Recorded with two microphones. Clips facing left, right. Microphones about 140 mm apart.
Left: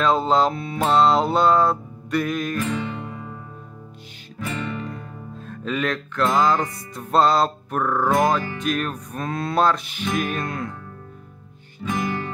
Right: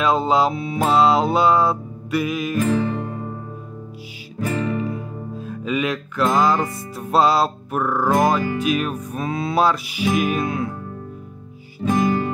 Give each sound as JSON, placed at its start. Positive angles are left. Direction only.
{"t": 0.0, "sound": "music", "side_deg": -5}
{"t": 3.0, "sound": "music", "side_deg": -40}
{"t": 4.4, "sound": "music", "side_deg": -40}
{"t": 4.8, "sound": "music", "side_deg": -5}
{"t": 11.8, "sound": "music", "side_deg": -40}